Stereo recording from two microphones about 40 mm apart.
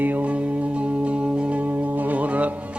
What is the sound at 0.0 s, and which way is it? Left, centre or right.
Music, right.